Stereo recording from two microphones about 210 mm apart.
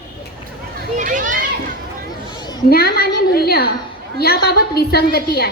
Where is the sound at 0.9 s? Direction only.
40° right (ahead or behind).